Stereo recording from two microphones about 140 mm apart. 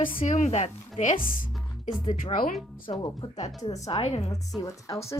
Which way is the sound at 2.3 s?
85° left.